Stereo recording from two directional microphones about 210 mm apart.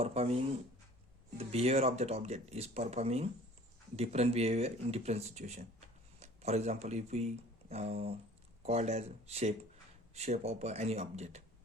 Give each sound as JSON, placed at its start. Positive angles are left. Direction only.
{"t": 0.0, "sound": "speech", "side_deg": -30}